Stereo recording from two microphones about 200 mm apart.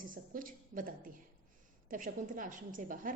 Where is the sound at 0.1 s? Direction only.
45° right (ahead or behind).